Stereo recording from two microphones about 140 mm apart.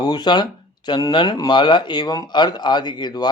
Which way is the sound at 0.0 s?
30° left (ahead or behind).